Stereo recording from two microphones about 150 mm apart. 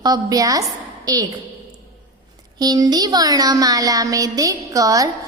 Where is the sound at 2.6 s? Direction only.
25° right (ahead or behind).